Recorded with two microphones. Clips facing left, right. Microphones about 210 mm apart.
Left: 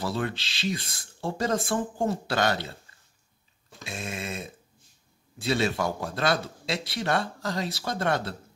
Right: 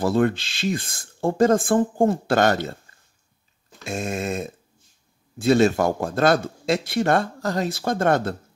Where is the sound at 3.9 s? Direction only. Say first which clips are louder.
Right 9 dB; 45° right (ahead or behind).